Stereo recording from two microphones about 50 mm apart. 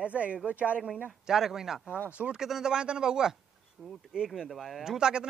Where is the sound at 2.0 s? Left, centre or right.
Right.